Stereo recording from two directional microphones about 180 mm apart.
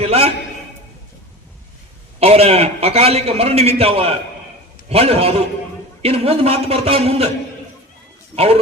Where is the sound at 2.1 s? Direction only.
35° right (ahead or behind).